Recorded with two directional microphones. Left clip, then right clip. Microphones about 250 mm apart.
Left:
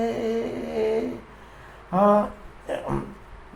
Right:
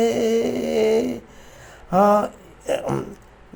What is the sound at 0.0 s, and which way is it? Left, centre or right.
Music, right.